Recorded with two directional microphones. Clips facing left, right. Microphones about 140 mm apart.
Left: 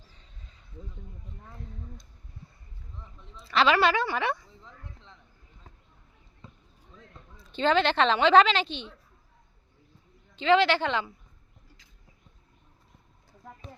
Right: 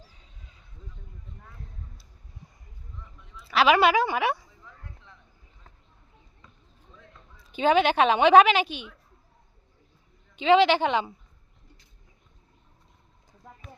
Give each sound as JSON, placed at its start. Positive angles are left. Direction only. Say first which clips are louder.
{"t": 3.5, "sound": "a woman's voice", "louder": "right 3 dB", "side_deg": -10}
{"t": 6.4, "sound": "basketball bounce", "louder": "left 7 dB", "side_deg": 25}
{"t": 7.4, "sound": "a woman's voice", "louder": "right 3 dB", "side_deg": -10}
{"t": 10.3, "sound": "a woman's voice", "louder": "right 3 dB", "side_deg": -15}
{"t": 13.6, "sound": "a sound", "louder": "left 2 dB", "side_deg": 35}